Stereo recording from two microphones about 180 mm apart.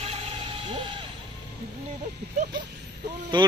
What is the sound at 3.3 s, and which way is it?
Speech, 25° right (ahead or behind).